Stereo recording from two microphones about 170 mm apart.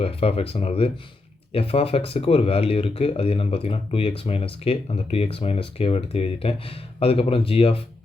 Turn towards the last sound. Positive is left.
turn(degrees=35)  # may be behind; listen again after turning